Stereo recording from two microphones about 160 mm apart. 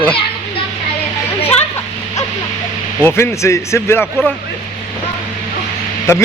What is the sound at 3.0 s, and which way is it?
Speech, 15° left (ahead or behind).